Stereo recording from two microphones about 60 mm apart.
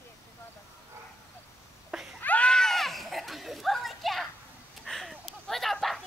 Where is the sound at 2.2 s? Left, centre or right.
Left.